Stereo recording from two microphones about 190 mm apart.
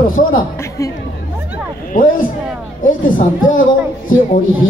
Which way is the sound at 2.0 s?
45° left (ahead or behind).